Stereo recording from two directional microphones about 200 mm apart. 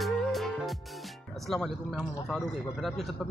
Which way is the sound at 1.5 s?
Centre (ahead or behind).